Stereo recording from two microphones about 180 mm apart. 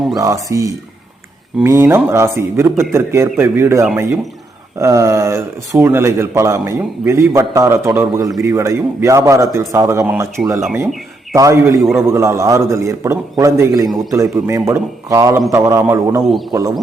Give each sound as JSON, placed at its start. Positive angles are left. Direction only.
{"t": 0.2, "sound": "speech", "side_deg": -20}